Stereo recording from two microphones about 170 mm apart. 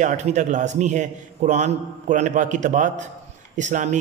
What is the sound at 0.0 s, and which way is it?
A man's voice, 45° right (ahead or behind).